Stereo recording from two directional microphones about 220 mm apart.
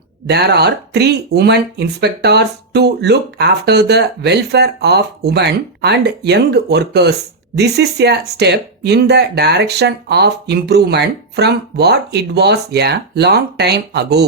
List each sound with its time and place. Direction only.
0.3 s speech: 45° right (ahead or behind)